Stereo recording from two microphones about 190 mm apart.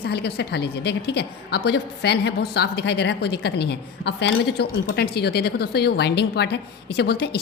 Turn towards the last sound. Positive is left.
turn(degrees=60)  # may be behind; listen again after turning